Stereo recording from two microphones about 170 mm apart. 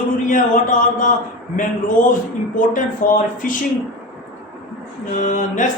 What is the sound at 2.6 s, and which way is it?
A man's voice, 50° left (ahead or behind).